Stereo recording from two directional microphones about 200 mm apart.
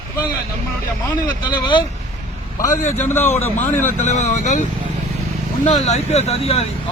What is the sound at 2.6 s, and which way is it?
Speech, 40° left (ahead or behind).